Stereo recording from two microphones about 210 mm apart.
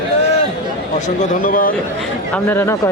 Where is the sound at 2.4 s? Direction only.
10° left (ahead or behind).